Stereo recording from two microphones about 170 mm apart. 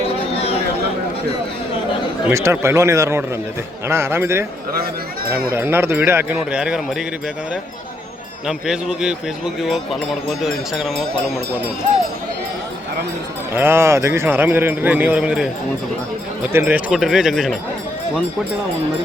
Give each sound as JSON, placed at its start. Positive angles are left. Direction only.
{"t": 0.3, "sound": "a sound", "side_deg": 35}
{"t": 2.3, "sound": "speech", "side_deg": -15}
{"t": 5.5, "sound": "speech", "side_deg": -15}
{"t": 8.4, "sound": "speech", "side_deg": -5}
{"t": 13.5, "sound": "speech", "side_deg": -15}
{"t": 16.5, "sound": "speech", "side_deg": -10}